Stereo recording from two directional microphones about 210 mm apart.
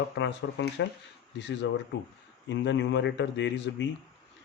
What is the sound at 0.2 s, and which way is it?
Speech, 60° left (ahead or behind).